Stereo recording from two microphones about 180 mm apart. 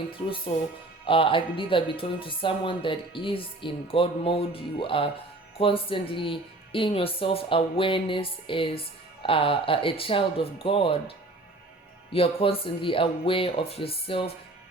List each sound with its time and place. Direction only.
1.0 s speech: 30° left (ahead or behind)
12.1 s speech: 30° left (ahead or behind)